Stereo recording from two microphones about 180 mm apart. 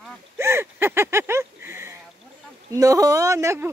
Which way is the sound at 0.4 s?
15° right (ahead or behind).